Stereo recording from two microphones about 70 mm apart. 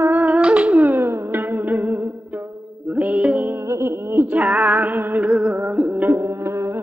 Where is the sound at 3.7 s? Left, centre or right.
Right.